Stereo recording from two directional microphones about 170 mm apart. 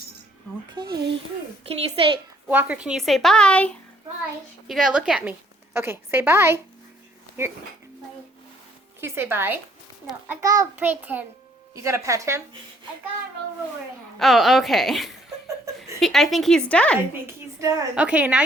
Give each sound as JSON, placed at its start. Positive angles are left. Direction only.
{"t": 1.6, "sound": "a woman's voice", "side_deg": -35}
{"t": 2.5, "sound": "a woman's voice", "side_deg": -10}
{"t": 4.7, "sound": "a woman's voice", "side_deg": -5}
{"t": 9.0, "sound": "a woman's voice", "side_deg": -15}
{"t": 10.8, "sound": "a woman's voice", "side_deg": -10}
{"t": 14.2, "sound": "a woman's voice", "side_deg": 0}
{"t": 15.4, "sound": "a sound", "side_deg": -20}
{"t": 16.0, "sound": "a woman's voice", "side_deg": 0}
{"t": 17.6, "sound": "a child's voice", "side_deg": -20}
{"t": 17.9, "sound": "a woman's voice", "side_deg": -10}